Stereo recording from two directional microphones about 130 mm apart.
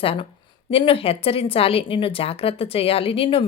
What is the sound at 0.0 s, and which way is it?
Speech, 45° left (ahead or behind).